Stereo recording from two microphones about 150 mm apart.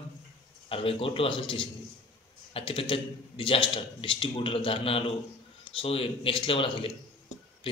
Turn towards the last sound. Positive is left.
turn(degrees=35)  # may be behind; listen again after turning